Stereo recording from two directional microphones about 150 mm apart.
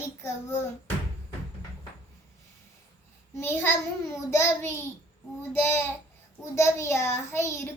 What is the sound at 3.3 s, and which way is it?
A child's voice, 15° left (ahead or behind).